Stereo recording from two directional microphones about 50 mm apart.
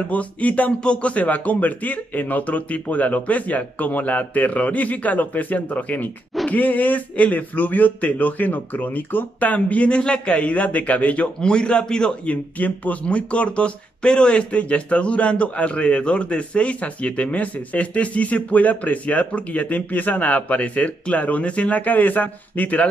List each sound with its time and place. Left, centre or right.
0.1 s speech: left
12.3 s speech: left